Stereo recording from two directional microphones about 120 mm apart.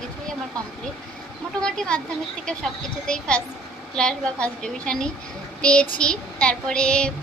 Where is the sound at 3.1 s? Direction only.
10° left (ahead or behind).